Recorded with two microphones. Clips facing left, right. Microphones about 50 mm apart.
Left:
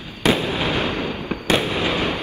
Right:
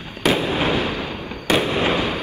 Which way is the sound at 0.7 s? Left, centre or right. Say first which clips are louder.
Even; left.